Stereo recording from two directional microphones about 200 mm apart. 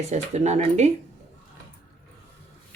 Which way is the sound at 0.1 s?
35° right (ahead or behind).